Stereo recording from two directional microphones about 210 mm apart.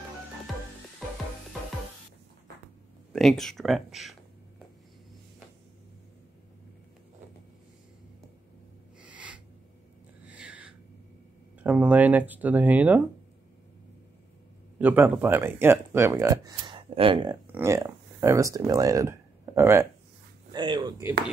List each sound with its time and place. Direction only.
3.1 s speech: centre (ahead or behind)
9.1 s a sound: 5° right (ahead or behind)
11.6 s speech: 5° right (ahead or behind)
14.8 s speech: 10° right (ahead or behind)
17.5 s speech: 10° right (ahead or behind)